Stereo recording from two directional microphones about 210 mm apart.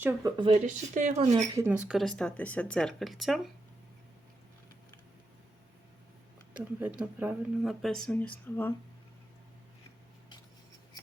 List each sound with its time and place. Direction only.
0.0 s speech: 15° right (ahead or behind)
0.6 s speech: 35° right (ahead or behind)
1.5 s speech: 10° right (ahead or behind)
6.6 s speech: 5° right (ahead or behind)